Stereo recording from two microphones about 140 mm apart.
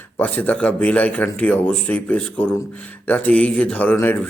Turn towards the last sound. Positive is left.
turn(degrees=15)  # may be behind; listen again after turning